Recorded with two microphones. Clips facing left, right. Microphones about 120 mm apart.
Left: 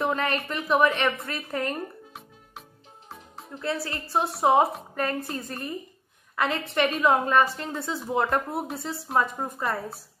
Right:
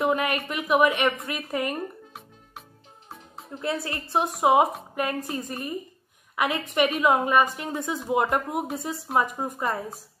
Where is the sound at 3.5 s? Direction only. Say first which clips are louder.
Right 1 dB; 20° right (ahead or behind).